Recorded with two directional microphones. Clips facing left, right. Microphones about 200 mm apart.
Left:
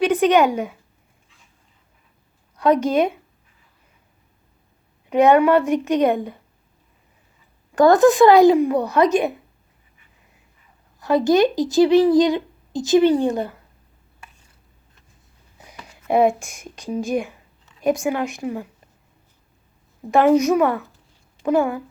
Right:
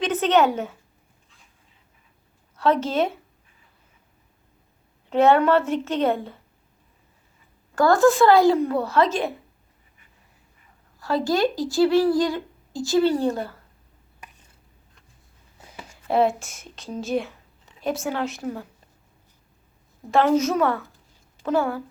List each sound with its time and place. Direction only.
0.0 s a woman's voice: 15° left (ahead or behind)
2.6 s speech: 15° left (ahead or behind)
5.0 s speech: 15° left (ahead or behind)
7.8 s speech: 20° left (ahead or behind)
11.0 s speech: 20° left (ahead or behind)
16.0 s speech: 15° left (ahead or behind)
20.1 s speech: 15° left (ahead or behind)